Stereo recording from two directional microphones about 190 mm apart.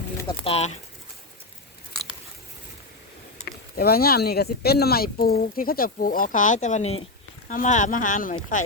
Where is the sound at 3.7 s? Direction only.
55° left (ahead or behind).